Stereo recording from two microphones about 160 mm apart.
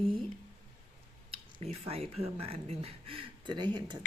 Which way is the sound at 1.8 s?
40° right (ahead or behind).